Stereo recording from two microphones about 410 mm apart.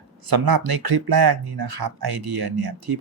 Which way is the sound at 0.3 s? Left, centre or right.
Right.